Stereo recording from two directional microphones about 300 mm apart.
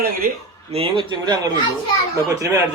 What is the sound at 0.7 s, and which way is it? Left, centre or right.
Speech, centre.